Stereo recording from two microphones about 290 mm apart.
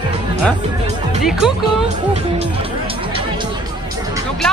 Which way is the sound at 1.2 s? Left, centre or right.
Centre.